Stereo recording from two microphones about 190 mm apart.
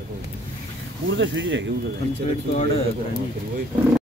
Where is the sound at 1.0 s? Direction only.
70° right (ahead or behind).